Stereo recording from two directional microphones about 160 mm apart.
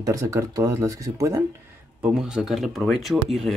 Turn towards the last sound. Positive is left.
turn(degrees=0)  # may be behind; listen again after turning